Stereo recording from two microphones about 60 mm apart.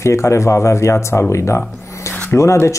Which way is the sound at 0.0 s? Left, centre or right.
Left.